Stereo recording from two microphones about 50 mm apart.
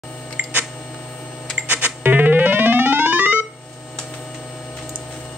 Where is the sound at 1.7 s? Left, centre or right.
Right.